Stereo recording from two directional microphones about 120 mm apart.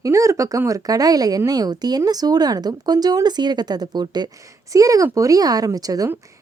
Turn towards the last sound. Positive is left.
turn(degrees=-30)  # may be behind; listen again after turning